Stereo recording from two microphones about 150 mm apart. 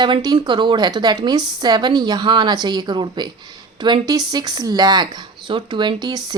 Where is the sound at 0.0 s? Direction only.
30° right (ahead or behind).